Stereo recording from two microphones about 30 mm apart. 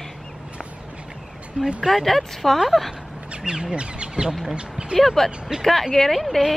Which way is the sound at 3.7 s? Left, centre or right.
Right.